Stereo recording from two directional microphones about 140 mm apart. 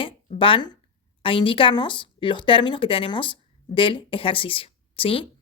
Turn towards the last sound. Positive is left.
turn(degrees=40)  # may be behind; listen again after turning